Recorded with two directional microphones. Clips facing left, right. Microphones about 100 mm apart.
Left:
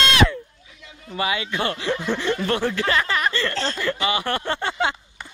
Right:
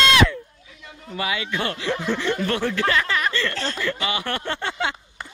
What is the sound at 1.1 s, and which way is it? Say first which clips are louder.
A man's voice: left 2 dB; 30° left (ahead or behind).